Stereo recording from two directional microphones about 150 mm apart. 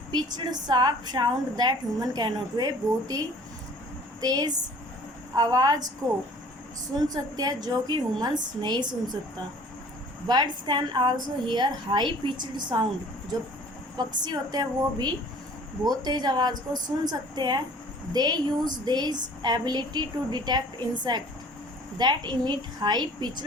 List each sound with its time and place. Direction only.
0.1 s a woman's voice: 30° right (ahead or behind)
7.1 s a woman's voice: 25° right (ahead or behind)
10.2 s a woman's voice: 30° right (ahead or behind)
14.3 s a woman's voice: 30° right (ahead or behind)